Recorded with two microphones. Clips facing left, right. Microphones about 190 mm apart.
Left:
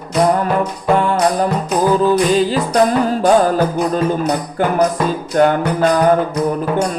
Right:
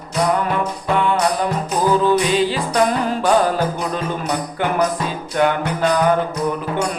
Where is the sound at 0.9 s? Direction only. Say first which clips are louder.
Left 2 dB; 40° left (ahead or behind).